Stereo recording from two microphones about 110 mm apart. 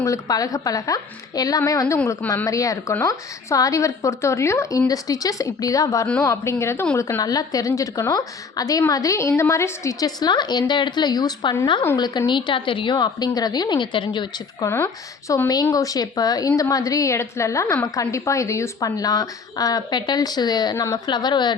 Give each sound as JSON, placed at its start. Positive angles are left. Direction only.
{"t": 0.0, "sound": "a woman's voice", "side_deg": 30}
{"t": 15.3, "sound": "a woman's voice", "side_deg": 30}